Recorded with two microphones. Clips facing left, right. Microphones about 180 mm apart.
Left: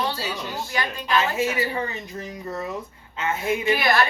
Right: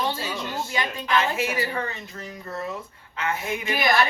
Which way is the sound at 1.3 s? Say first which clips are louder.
Left 2 dB; 20° left (ahead or behind).